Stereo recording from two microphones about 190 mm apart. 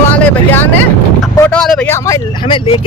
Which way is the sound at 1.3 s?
15° left (ahead or behind).